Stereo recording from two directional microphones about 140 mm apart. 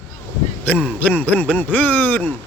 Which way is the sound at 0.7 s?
10° left (ahead or behind).